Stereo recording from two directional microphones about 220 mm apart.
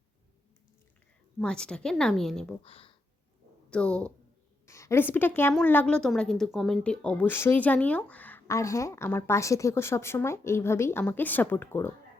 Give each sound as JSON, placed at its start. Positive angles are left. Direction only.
{"t": 1.4, "sound": "speech", "side_deg": 5}
{"t": 2.6, "sound": "speech", "side_deg": 25}
{"t": 3.7, "sound": "a woman's voice", "side_deg": 5}